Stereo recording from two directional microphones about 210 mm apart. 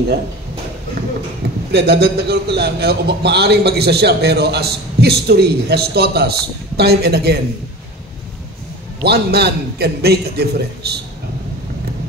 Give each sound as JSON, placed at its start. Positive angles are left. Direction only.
{"t": 1.7, "sound": "a man's voice", "side_deg": -50}
{"t": 9.0, "sound": "a man's voice", "side_deg": -50}